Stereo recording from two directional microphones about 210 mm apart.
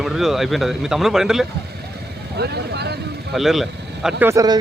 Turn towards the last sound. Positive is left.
turn(degrees=-15)  # may be behind; listen again after turning